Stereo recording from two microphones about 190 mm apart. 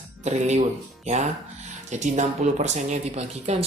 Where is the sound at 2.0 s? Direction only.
40° right (ahead or behind).